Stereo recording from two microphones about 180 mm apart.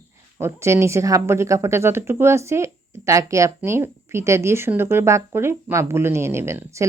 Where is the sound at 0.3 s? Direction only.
15° right (ahead or behind).